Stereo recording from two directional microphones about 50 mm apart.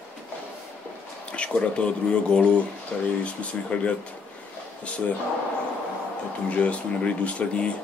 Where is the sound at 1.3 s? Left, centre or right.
Left.